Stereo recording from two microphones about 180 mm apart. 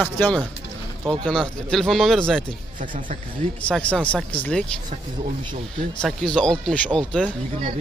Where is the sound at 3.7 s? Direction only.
5° left (ahead or behind).